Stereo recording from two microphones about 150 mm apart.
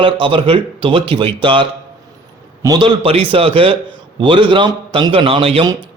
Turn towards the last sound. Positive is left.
turn(degrees=-40)  # may be behind; listen again after turning